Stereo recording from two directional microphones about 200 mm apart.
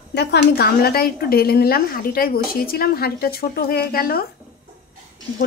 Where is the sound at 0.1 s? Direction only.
55° left (ahead or behind).